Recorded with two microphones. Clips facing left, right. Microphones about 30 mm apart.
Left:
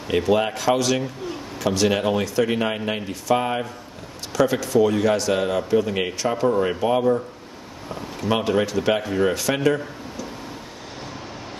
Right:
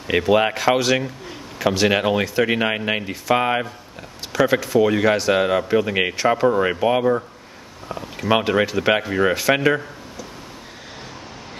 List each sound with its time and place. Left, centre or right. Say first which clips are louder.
0.2 s speech: right 4 dB; right
4.3 s speech: right 2 dB; right
6.1 s speech: right 3 dB; right
8.3 s speech: right 3 dB; right